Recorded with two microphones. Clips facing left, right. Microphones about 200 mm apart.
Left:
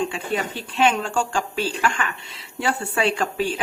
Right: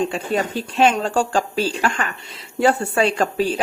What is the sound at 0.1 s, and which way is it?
A woman's voice, 40° right (ahead or behind).